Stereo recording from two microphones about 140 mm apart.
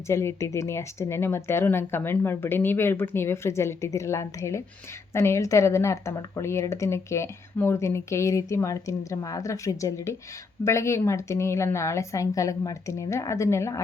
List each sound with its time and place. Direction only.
0.1 s speech: 20° left (ahead or behind)